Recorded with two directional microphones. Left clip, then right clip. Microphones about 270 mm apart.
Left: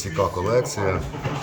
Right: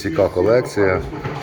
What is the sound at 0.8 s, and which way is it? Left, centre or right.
Speech, left.